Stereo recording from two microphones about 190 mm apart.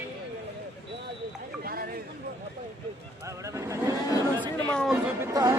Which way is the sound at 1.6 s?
50° right (ahead or behind).